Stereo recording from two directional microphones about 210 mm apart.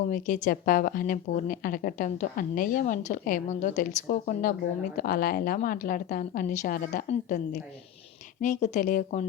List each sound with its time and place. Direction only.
0.1 s a woman's voice: 35° left (ahead or behind)